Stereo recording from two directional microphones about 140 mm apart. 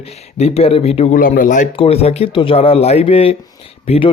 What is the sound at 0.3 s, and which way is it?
Speech, 45° left (ahead or behind).